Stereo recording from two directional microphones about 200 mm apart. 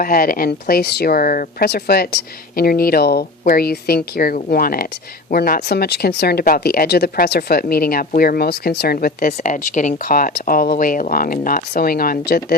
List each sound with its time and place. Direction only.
0.0 s speech: 45° left (ahead or behind)